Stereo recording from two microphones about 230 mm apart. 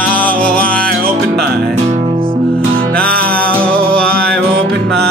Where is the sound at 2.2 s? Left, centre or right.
Right.